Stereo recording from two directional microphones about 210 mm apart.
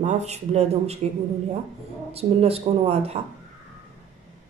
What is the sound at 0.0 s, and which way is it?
Speech, 30° right (ahead or behind).